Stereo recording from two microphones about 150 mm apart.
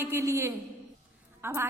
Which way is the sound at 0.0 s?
15° right (ahead or behind).